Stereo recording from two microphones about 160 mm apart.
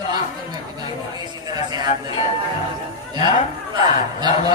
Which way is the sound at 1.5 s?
25° right (ahead or behind).